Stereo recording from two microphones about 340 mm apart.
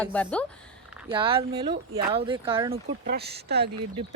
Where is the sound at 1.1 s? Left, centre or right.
Centre.